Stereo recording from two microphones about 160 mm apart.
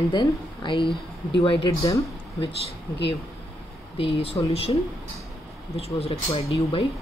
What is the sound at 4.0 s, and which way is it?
Speech, 35° left (ahead or behind).